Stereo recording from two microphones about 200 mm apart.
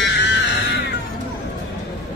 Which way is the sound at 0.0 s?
60° left (ahead or behind).